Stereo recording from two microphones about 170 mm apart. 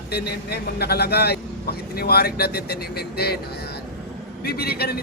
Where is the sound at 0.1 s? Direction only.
70° left (ahead or behind).